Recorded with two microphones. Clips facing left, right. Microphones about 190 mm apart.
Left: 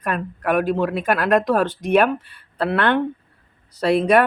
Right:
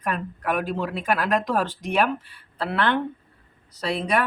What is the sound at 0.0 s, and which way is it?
Speech, 60° left (ahead or behind).